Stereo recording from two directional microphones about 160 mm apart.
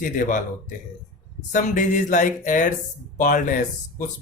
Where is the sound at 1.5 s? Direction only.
55° left (ahead or behind).